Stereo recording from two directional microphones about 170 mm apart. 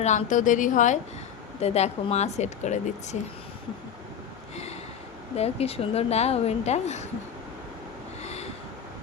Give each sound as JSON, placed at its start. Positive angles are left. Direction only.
{"t": 0.0, "sound": "a woman's voice", "side_deg": 45}
{"t": 1.6, "sound": "a woman's voice", "side_deg": 40}
{"t": 5.4, "sound": "a woman's voice", "side_deg": 35}
{"t": 8.2, "sound": "vehicle", "side_deg": 40}